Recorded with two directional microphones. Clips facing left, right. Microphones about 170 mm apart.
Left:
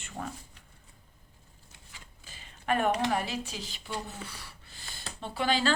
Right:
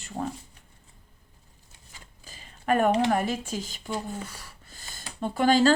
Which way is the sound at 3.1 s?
50° right (ahead or behind).